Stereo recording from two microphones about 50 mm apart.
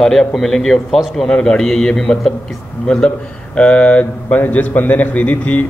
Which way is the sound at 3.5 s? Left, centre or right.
Left.